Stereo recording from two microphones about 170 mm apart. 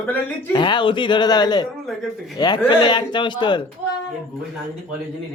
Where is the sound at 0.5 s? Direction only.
30° left (ahead or behind).